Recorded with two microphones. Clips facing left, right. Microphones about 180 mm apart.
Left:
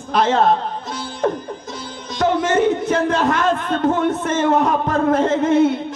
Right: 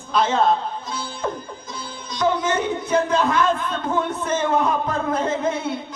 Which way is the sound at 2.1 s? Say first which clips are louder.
Left 4 dB; 75° left (ahead or behind).